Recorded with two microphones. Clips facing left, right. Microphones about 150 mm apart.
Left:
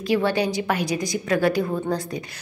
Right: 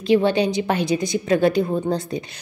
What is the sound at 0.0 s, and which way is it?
A woman's voice, 20° right (ahead or behind).